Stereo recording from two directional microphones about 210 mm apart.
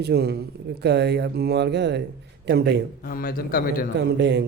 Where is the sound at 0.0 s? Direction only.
50° right (ahead or behind).